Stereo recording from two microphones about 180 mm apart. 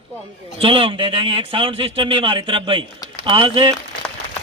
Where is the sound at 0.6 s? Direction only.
30° right (ahead or behind).